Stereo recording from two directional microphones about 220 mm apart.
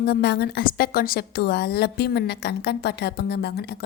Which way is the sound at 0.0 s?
45° left (ahead or behind).